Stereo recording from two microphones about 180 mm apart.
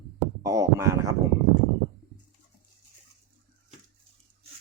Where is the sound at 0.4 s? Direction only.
15° right (ahead or behind).